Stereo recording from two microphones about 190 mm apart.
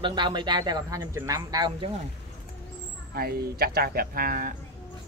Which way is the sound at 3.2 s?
55° right (ahead or behind).